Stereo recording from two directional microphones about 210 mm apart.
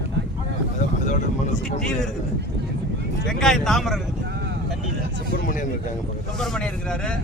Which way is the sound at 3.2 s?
Centre (ahead or behind).